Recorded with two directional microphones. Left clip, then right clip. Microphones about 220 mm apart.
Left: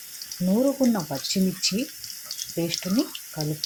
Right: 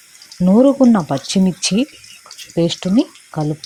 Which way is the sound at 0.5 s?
35° right (ahead or behind).